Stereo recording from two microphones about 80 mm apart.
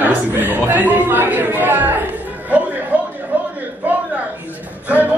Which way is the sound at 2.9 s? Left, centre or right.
Right.